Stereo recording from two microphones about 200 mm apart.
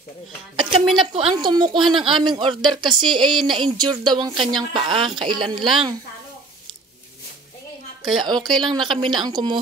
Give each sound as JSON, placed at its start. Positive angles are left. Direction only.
{"t": 0.6, "sound": "speech", "side_deg": -30}
{"t": 8.2, "sound": "speech", "side_deg": -20}